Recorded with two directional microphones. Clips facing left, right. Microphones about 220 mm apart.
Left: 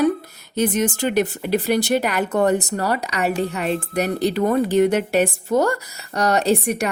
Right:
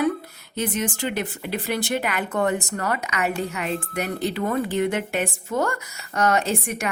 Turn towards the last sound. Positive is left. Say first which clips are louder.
# left 6 dB
turn(degrees=35)  # may be behind; listen again after turning